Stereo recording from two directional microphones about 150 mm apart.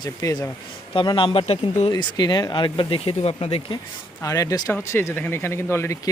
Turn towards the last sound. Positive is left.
turn(degrees=15)  # may be behind; listen again after turning